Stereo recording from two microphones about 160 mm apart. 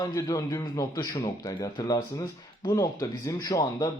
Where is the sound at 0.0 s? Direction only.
25° left (ahead or behind).